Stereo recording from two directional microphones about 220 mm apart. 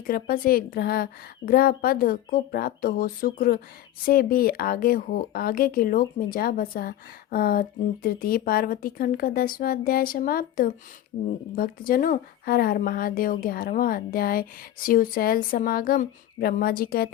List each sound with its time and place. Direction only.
0.1 s speech: 40° left (ahead or behind)